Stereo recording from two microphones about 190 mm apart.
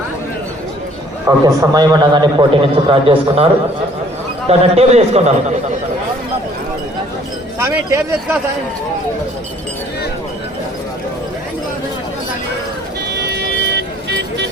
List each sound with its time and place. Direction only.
1.5 s a man's voice: 20° right (ahead or behind); by 5.3 s 35° right (ahead or behind)
7.6 s speech: 15° right (ahead or behind)
13.1 s music: 65° right (ahead or behind)